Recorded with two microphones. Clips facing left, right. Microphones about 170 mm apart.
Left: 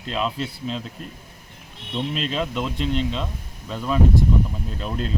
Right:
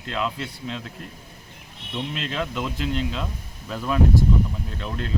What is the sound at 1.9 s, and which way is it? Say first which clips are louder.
Speech: left 3 dB; 25° left (ahead or behind).